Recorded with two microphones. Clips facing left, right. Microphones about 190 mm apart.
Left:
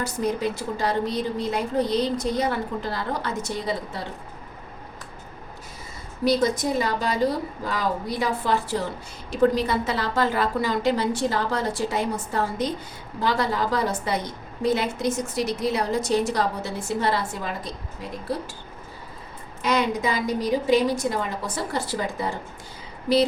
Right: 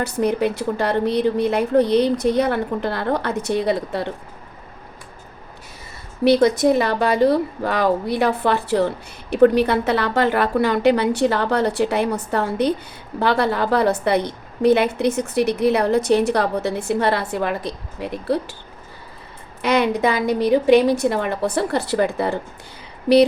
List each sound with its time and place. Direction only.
0.0 s a woman's voice: 65° right (ahead or behind)
6.2 s a woman's voice: 65° right (ahead or behind)
19.6 s a woman's voice: 65° right (ahead or behind)